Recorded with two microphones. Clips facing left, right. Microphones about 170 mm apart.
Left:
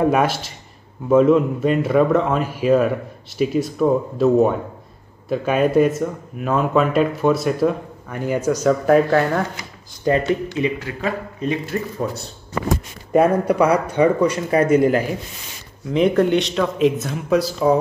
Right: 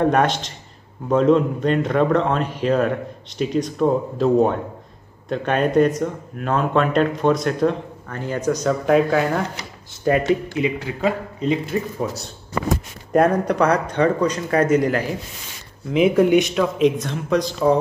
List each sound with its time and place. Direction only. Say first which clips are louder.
0.0 s speech: even; 5° left (ahead or behind)
10.1 s a man's voice: right 1 dB; 15° right (ahead or behind)
12.0 s speech: left 1 dB; 10° right (ahead or behind)
13.1 s speech: left 1 dB; 5° left (ahead or behind)
15.9 s speech: right 1 dB; 5° right (ahead or behind)